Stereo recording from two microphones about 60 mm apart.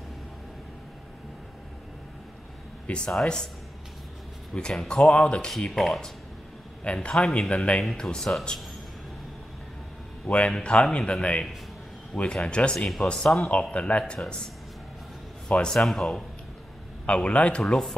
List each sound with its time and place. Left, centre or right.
2.9 s speech: left
4.6 s speech: centre
5.5 s speech: centre
6.8 s speech: centre
10.2 s speech: left
12.1 s speech: centre
12.4 s speech: centre
12.7 s speech: centre
13.5 s speech: left
15.4 s speech: centre
17.0 s speech: centre